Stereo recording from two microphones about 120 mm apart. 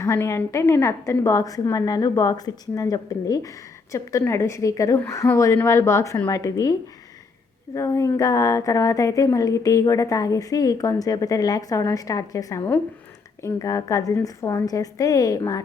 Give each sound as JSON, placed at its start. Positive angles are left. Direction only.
{"t": 0.0, "sound": "a woman's voice", "side_deg": 20}
{"t": 7.8, "sound": "speech", "side_deg": 25}